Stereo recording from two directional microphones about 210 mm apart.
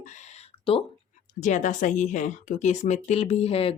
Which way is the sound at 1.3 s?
35° left (ahead or behind).